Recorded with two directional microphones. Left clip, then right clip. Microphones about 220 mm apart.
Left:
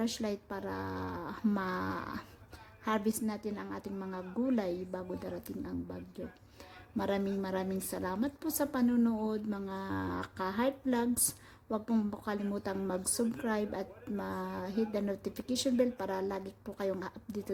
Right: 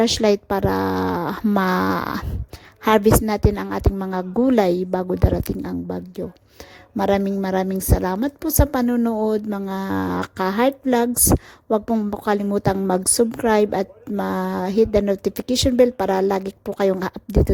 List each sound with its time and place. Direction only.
0.0 s a woman's voice: 35° right (ahead or behind)